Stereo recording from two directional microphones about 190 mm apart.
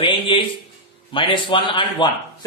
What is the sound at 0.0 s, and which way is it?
Speech, 25° left (ahead or behind).